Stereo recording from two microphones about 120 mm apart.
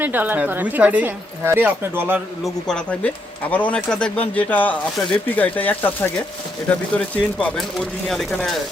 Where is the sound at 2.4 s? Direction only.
5° left (ahead or behind).